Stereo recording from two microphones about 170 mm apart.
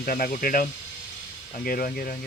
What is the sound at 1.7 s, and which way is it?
Speech, 60° left (ahead or behind).